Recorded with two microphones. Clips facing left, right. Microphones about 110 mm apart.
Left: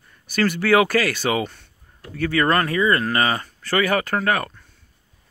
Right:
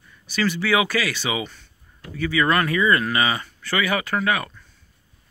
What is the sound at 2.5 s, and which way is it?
Speech, 35° left (ahead or behind).